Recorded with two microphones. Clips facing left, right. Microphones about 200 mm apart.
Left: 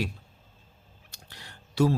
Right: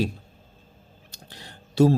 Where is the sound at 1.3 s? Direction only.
25° right (ahead or behind).